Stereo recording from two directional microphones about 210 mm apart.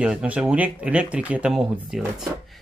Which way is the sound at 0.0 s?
5° right (ahead or behind).